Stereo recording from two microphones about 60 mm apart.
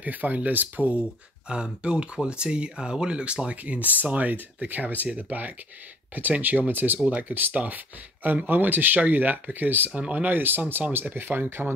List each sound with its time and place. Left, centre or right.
0.0 s speech: right
1.5 s speech: centre; by 9.8 s right
9.8 s speech: right